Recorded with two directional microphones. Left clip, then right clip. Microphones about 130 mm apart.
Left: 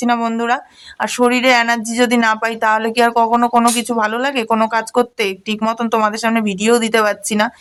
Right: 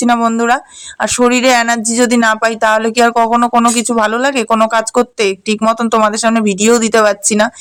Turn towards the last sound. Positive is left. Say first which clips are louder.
# right 5 dB
turn(degrees=-30)  # may be behind; listen again after turning